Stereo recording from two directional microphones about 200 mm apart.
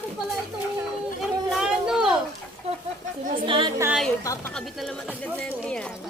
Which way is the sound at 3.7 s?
10° right (ahead or behind).